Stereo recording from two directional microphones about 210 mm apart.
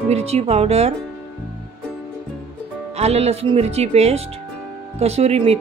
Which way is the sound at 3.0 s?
30° right (ahead or behind).